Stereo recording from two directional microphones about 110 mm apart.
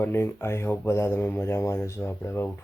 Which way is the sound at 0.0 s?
20° left (ahead or behind).